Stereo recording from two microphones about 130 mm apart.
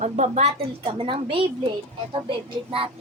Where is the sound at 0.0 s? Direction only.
60° right (ahead or behind); by 1.5 s 40° right (ahead or behind).